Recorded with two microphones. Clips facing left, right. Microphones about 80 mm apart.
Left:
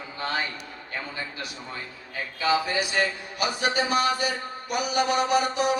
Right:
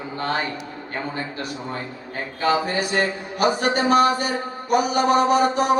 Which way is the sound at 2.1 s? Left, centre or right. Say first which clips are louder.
Right 3 dB; right.